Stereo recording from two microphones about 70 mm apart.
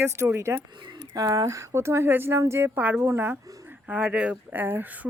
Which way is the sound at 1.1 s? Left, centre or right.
Right.